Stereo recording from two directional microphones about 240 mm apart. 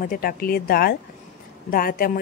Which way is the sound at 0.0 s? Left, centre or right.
Left.